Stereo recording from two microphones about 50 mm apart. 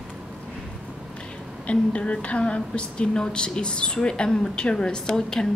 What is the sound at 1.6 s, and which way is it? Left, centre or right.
A woman's voice, left.